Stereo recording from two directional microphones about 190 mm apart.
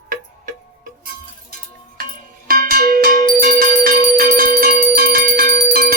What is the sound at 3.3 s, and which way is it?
Bell, 50° right (ahead or behind).